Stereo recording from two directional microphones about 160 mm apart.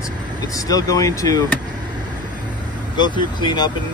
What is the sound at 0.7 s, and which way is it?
Speech, 20° left (ahead or behind).